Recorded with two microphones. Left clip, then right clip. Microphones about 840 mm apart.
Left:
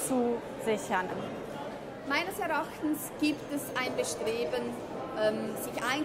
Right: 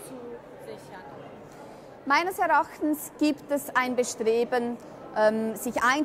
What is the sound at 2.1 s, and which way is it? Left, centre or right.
A woman's voice, right.